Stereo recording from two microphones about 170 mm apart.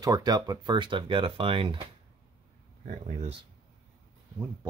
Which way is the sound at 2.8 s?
50° right (ahead or behind).